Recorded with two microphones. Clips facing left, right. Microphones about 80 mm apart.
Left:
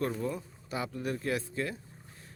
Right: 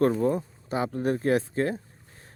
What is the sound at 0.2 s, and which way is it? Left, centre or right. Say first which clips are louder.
Speech: right 10 dB; right.